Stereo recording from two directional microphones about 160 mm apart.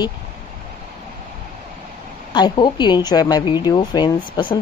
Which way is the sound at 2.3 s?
25° left (ahead or behind).